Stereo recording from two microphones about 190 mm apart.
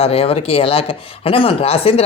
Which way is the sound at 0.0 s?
30° left (ahead or behind).